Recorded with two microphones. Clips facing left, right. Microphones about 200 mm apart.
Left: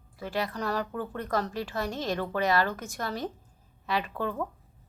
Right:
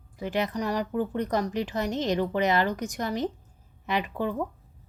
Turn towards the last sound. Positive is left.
turn(degrees=-15)  # may be behind; listen again after turning